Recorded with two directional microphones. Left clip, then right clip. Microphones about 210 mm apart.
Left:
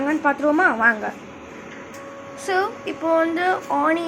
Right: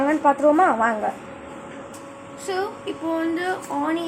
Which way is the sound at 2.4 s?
15° left (ahead or behind).